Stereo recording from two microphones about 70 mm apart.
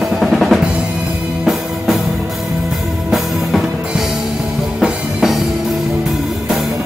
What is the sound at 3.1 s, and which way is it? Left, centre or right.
Music, centre.